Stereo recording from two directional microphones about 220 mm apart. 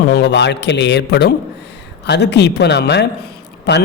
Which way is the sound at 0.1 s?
50° left (ahead or behind).